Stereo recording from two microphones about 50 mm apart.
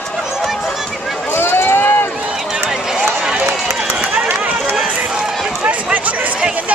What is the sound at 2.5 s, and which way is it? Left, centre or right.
Run, centre.